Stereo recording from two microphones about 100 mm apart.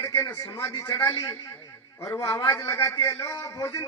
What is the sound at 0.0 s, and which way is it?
A man's voice, 35° left (ahead or behind).